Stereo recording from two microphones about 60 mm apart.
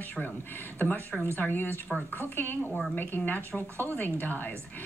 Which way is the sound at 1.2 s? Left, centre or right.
Left.